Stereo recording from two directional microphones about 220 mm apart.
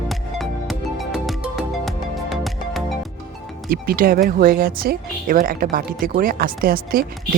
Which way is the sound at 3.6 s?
40° right (ahead or behind).